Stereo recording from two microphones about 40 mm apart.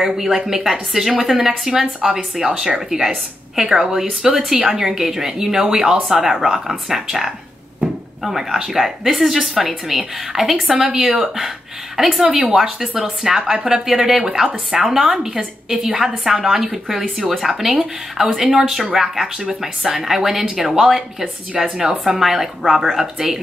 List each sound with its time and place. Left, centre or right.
0.0 s speech: centre
10.9 s speech: right
11.1 s speech: centre